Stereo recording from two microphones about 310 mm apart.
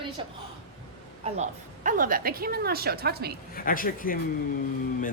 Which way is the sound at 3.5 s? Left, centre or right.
Left.